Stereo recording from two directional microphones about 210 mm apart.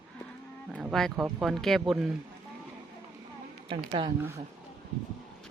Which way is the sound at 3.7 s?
25° right (ahead or behind).